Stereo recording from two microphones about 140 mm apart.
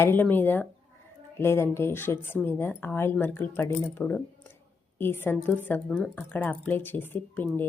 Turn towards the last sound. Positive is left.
turn(degrees=15)  # may be behind; listen again after turning